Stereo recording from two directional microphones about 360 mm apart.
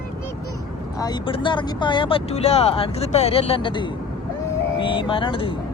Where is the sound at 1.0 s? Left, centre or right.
Centre.